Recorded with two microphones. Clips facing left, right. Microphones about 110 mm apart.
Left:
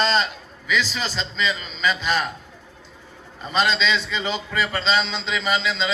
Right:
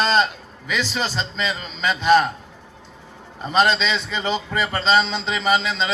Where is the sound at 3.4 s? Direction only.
50° right (ahead or behind).